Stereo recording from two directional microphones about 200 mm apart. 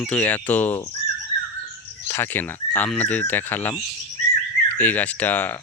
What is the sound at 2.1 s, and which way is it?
Speech, 10° left (ahead or behind).